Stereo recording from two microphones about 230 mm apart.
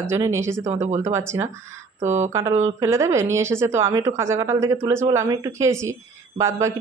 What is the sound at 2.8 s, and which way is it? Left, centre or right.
Speech, centre.